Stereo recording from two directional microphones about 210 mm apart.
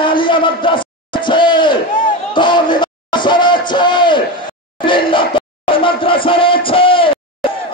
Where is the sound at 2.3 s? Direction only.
20° left (ahead or behind).